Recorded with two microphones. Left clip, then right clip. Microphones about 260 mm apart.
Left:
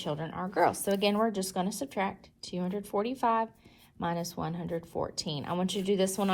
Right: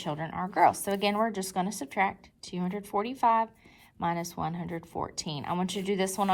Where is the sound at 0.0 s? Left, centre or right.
Right.